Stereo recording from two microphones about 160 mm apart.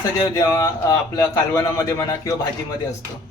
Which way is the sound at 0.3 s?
20° left (ahead or behind).